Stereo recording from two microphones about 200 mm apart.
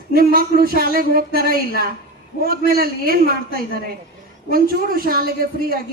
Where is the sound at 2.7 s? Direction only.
50° right (ahead or behind).